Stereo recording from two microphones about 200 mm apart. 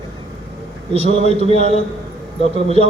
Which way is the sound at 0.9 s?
30° right (ahead or behind).